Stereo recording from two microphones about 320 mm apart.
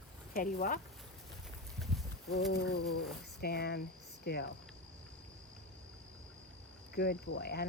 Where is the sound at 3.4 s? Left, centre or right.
Left.